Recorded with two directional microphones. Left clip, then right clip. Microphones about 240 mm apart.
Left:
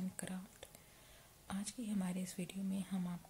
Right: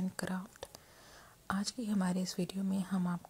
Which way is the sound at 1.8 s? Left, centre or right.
Right.